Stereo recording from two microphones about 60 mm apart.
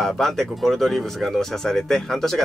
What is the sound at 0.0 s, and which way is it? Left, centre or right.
Speech, centre.